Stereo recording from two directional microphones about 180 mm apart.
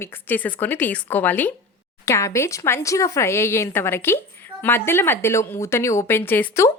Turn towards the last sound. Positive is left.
turn(degrees=15)  # may be behind; listen again after turning